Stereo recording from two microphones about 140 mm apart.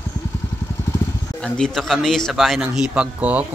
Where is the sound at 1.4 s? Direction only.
5° left (ahead or behind).